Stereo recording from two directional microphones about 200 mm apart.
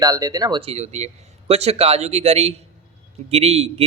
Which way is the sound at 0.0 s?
20° right (ahead or behind).